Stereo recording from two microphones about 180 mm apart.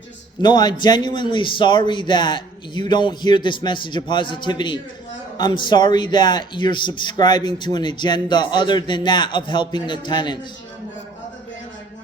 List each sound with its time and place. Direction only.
0.4 s a man's voice: 25° left (ahead or behind)